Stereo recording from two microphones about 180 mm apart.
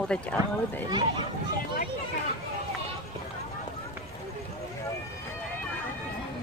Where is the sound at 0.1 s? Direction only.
5° left (ahead or behind).